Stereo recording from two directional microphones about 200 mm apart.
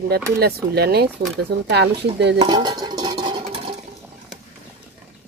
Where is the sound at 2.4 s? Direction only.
20° right (ahead or behind).